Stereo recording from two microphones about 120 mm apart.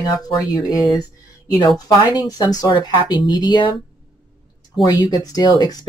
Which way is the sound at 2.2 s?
35° left (ahead or behind).